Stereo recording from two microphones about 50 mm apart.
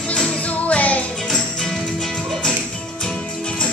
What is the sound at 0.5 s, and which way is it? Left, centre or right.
Music, left.